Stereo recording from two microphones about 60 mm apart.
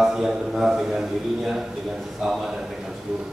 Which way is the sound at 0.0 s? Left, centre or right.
Centre.